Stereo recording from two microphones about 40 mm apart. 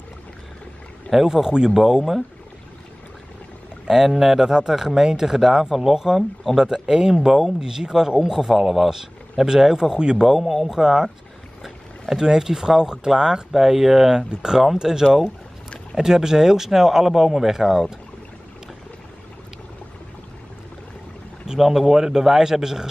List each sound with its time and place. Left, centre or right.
1.1 s speech: centre
3.9 s speech: centre
7.6 s speech: centre
9.9 s a man's voice: right
10.2 s speech: centre
12.2 s speech: centre
21.5 s speech: centre